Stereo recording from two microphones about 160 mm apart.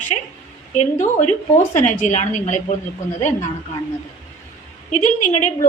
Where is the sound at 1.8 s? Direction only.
50° left (ahead or behind).